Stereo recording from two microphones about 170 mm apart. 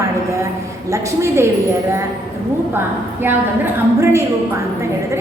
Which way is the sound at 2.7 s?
10° right (ahead or behind).